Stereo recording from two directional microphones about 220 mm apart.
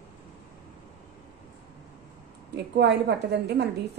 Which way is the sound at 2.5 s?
50° right (ahead or behind).